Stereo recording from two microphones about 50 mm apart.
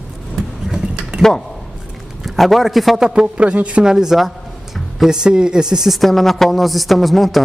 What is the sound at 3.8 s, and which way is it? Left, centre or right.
Speech, centre.